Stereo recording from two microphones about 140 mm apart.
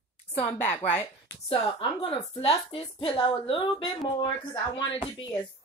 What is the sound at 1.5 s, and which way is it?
A woman's voice, 40° left (ahead or behind).